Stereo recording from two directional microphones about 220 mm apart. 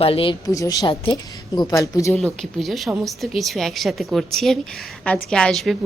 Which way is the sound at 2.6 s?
Centre (ahead or behind).